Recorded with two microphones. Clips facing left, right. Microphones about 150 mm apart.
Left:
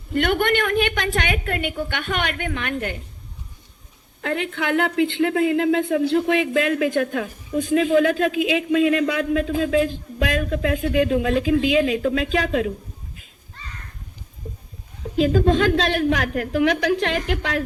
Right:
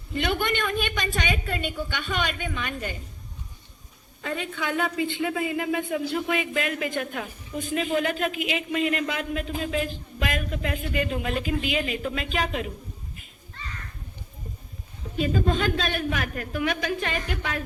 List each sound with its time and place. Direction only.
0.1 s a woman's voice: 60° left (ahead or behind)
4.2 s speech: 70° left (ahead or behind); by 7.8 s 90° left
8.9 s speech: 90° left
15.1 s speech: 90° left